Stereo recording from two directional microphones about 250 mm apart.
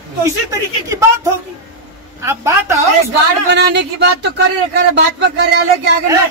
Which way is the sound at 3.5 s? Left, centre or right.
Right.